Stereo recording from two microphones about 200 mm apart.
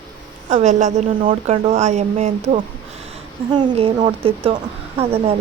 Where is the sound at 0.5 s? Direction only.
35° right (ahead or behind).